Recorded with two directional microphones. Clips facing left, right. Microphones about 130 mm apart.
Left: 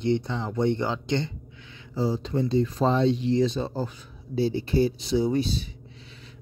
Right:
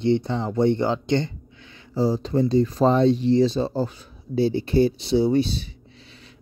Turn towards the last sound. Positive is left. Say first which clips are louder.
# right 2 dB
turn(degrees=40)  # may be behind; listen again after turning